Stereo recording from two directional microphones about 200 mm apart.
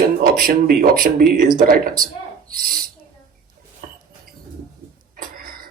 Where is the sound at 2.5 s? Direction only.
45° right (ahead or behind).